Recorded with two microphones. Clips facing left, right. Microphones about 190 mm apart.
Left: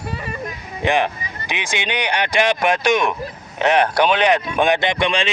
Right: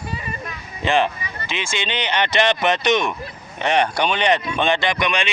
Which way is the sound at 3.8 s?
60° left (ahead or behind).